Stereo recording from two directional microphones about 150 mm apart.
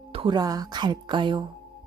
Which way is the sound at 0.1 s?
35° right (ahead or behind).